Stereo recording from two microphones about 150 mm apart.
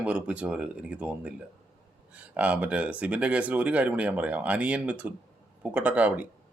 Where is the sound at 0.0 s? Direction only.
10° right (ahead or behind).